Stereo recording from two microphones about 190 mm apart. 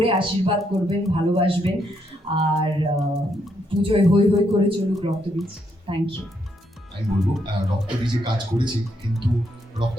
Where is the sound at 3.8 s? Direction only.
30° right (ahead or behind).